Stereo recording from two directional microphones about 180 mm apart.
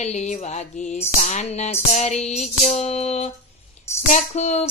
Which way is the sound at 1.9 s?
40° left (ahead or behind).